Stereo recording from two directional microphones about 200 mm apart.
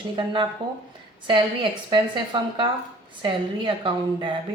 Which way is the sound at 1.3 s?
25° right (ahead or behind).